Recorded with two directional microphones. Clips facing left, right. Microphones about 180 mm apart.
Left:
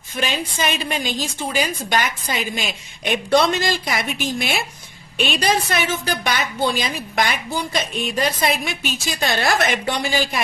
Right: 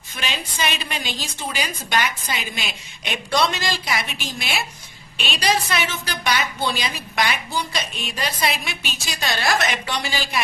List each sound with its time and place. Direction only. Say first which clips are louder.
0.2 s a woman's voice: left 4 dB; 45° left (ahead or behind)